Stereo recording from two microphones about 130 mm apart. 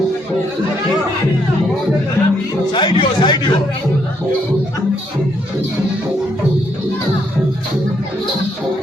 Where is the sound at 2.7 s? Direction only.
35° left (ahead or behind).